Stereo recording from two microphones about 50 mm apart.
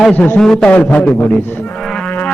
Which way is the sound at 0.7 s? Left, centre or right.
Left.